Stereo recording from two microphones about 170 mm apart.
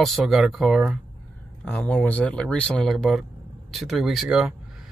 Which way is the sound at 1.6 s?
10° left (ahead or behind).